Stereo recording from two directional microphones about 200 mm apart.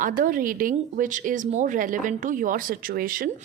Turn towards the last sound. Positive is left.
turn(degrees=-45)  # may be behind; listen again after turning